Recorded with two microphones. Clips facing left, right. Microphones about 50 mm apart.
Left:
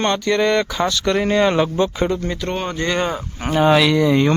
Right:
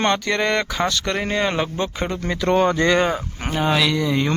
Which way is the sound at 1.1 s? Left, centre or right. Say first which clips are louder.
Left 5 dB; centre.